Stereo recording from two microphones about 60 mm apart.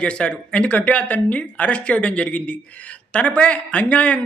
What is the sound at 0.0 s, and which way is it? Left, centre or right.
A man's voice, centre.